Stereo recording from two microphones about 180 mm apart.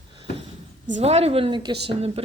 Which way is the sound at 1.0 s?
35° right (ahead or behind).